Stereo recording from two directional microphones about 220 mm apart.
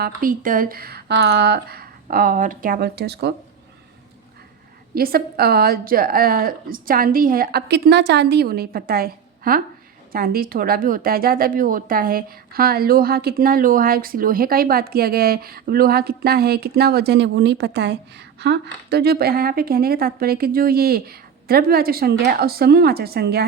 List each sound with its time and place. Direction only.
0.0 s speech: 40° right (ahead or behind)
4.9 s speech: 45° right (ahead or behind)